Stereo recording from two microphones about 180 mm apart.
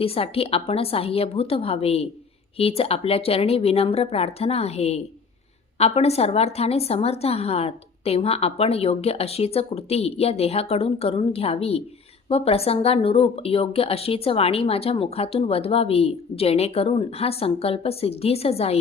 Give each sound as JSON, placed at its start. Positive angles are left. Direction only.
{"t": 0.0, "sound": "speech", "side_deg": 30}